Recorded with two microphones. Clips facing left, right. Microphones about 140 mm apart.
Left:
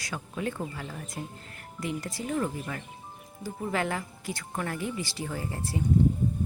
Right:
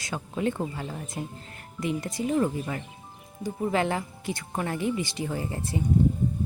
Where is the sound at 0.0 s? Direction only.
25° right (ahead or behind).